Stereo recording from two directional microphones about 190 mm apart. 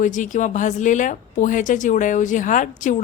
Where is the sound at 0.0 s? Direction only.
40° left (ahead or behind).